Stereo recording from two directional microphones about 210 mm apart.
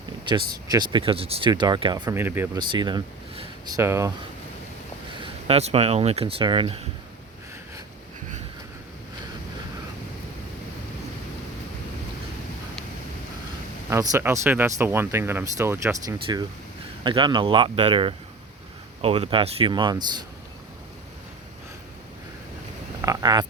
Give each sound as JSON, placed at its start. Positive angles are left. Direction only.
{"t": 0.3, "sound": "speech", "side_deg": -20}
{"t": 2.6, "sound": "speech", "side_deg": -20}
{"t": 5.2, "sound": "speech", "side_deg": -30}
{"t": 13.9, "sound": "speech", "side_deg": -15}
{"t": 23.0, "sound": "a sound", "side_deg": -20}